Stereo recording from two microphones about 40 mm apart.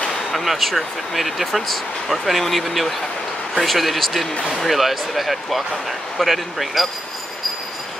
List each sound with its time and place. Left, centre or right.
0.3 s speech: centre